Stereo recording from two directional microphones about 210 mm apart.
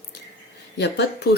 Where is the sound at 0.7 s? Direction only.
55° left (ahead or behind).